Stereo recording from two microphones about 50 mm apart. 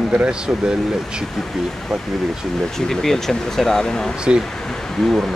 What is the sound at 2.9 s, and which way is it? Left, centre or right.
Speech, centre.